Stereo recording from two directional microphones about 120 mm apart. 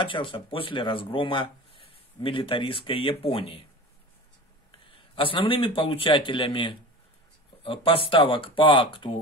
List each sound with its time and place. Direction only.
0.0 s speech: 45° left (ahead or behind)
4.6 s a man's voice: 45° left (ahead or behind)